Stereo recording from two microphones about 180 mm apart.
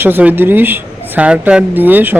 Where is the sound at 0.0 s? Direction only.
10° right (ahead or behind).